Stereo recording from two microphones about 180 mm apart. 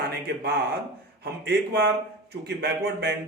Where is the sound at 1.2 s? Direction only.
65° right (ahead or behind).